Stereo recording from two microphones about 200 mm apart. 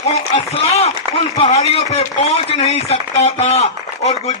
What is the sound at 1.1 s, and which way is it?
A man's voice, 30° left (ahead or behind).